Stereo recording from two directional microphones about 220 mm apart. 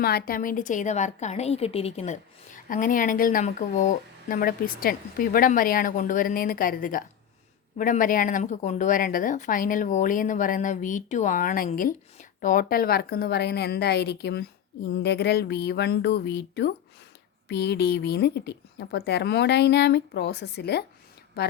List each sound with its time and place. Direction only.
0.0 s a woman's voice: 45° left (ahead or behind)